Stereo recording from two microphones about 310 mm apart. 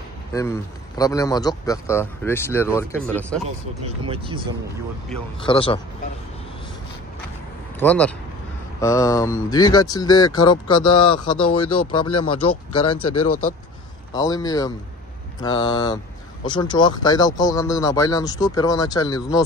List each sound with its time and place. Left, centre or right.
0.3 s a man's voice: centre
5.4 s speech: centre
7.8 s speech: centre
11.5 s speech: left
14.1 s speech: centre